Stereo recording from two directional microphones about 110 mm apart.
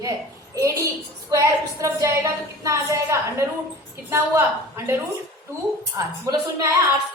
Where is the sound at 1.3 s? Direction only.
30° right (ahead or behind).